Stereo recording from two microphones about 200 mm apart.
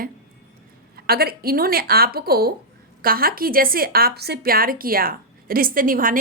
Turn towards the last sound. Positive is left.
turn(degrees=-45)  # may be behind; listen again after turning